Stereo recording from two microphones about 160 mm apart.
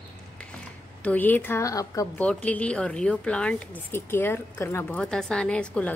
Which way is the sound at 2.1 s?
10° left (ahead or behind).